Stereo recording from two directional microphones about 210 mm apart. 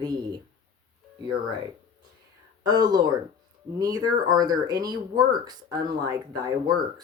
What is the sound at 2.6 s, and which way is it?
Speech, 20° right (ahead or behind).